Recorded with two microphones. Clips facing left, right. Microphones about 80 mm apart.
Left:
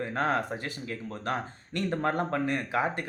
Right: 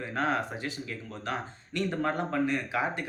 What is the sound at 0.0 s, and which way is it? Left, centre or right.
Speech, left.